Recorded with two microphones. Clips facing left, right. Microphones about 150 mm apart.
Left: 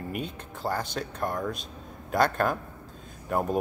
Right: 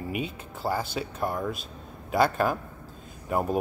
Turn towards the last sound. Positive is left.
turn(degrees=-5)  # may be behind; listen again after turning